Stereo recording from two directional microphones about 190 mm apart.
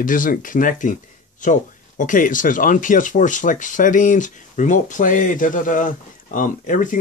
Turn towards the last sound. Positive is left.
turn(degrees=45)  # may be behind; listen again after turning